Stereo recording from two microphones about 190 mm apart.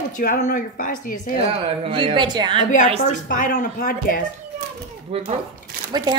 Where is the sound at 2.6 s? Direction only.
40° left (ahead or behind).